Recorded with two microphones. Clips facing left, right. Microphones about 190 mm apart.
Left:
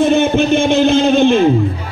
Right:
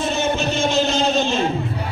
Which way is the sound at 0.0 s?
55° left (ahead or behind).